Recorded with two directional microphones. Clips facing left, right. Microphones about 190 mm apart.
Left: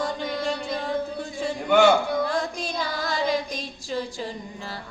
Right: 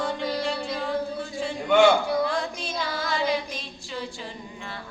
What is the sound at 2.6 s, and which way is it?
Child singing, 40° left (ahead or behind).